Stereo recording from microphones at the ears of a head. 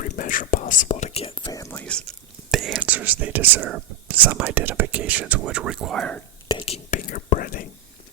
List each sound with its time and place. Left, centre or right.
0.0 s whispering: left
1.9 s whispering: right
6.9 s whispering: left